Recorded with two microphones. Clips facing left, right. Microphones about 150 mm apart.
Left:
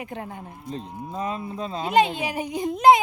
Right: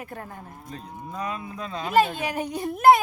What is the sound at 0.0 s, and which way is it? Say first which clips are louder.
Speech: left 3 dB; 15° left (ahead or behind).